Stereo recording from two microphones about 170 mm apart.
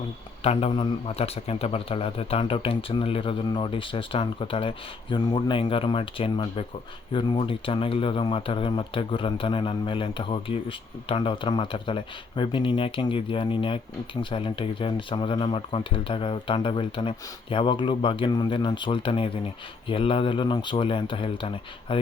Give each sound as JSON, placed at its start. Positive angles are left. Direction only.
{"t": 0.4, "sound": "a man's voice", "side_deg": 30}